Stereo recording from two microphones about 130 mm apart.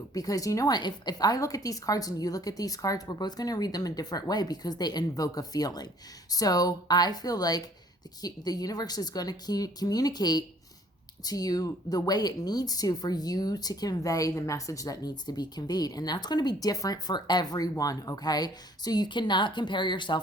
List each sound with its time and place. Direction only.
0.1 s a woman's voice: 30° left (ahead or behind)